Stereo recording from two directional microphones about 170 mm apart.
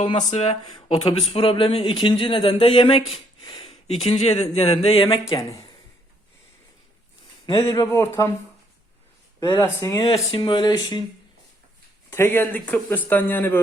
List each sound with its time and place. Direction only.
0.3 s speech: 40° left (ahead or behind)
7.4 s speech: 25° left (ahead or behind)
9.5 s speech: 15° left (ahead or behind)
10.1 s speech: 30° left (ahead or behind)
12.1 s speech: 15° left (ahead or behind)